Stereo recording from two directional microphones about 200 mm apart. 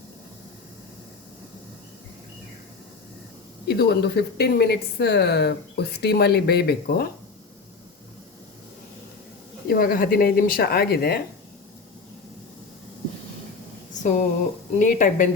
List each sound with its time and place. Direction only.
3.7 s speech: 55° left (ahead or behind)
9.6 s speech: 45° left (ahead or behind)
14.0 s speech: 35° left (ahead or behind)